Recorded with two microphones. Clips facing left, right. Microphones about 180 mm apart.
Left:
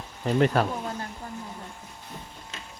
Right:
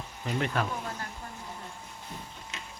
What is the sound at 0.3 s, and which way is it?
Speech, 40° left (ahead or behind).